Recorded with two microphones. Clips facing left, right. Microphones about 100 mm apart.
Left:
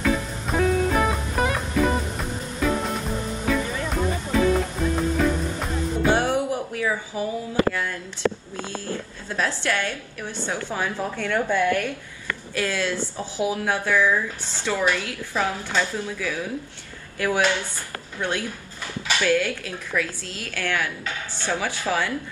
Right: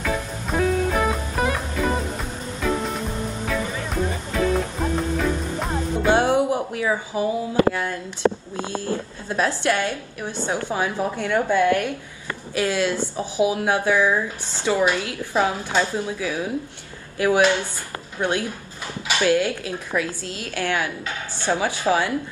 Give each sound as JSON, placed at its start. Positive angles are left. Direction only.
{"t": 0.0, "sound": "music", "side_deg": 0}
{"t": 6.1, "sound": "music", "side_deg": -20}
{"t": 7.7, "sound": "a sound", "side_deg": -20}
{"t": 9.3, "sound": "speech", "side_deg": -20}